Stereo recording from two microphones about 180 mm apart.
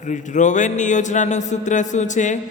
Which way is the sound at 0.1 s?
45° left (ahead or behind).